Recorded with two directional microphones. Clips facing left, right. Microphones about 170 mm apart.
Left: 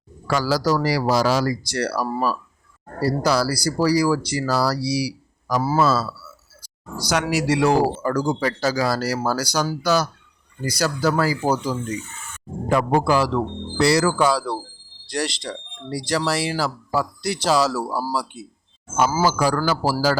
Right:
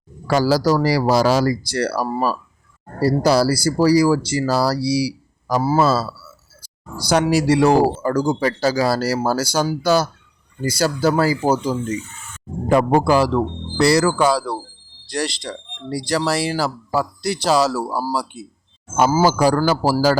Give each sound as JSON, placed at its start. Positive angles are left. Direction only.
{"t": 0.3, "sound": "speech", "side_deg": -35}
{"t": 12.7, "sound": "speech", "side_deg": -35}